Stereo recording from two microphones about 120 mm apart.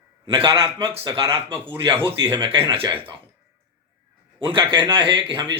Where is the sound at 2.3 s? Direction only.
40° right (ahead or behind).